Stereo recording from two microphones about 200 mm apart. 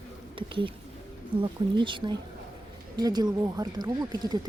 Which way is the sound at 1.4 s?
25° right (ahead or behind).